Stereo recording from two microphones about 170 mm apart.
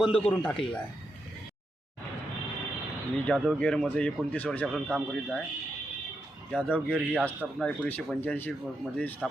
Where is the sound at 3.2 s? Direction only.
5° left (ahead or behind).